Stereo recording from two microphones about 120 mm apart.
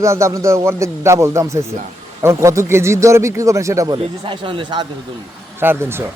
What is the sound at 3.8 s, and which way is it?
A man's voice, 45° right (ahead or behind).